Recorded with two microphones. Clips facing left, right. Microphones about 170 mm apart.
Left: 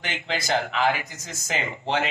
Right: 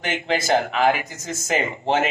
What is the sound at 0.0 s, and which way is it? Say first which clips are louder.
Speech: right 6 dB; 50° right (ahead or behind).